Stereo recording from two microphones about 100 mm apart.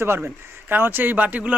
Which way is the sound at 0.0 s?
20° right (ahead or behind).